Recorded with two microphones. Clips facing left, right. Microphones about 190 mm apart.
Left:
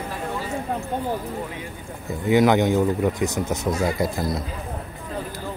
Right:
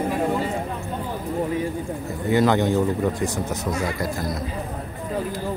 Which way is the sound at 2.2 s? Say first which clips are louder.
Left 2 dB; 15° left (ahead or behind).